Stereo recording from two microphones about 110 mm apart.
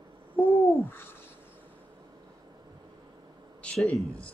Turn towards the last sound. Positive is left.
turn(degrees=0)  # may be behind; listen again after turning